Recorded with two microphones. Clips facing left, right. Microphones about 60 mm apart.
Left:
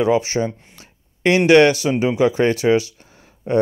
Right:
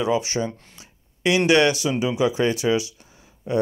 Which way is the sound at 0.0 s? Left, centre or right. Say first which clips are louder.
Left 5 dB; left.